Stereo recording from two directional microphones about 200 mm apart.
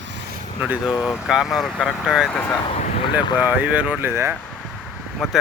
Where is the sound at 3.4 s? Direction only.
10° right (ahead or behind).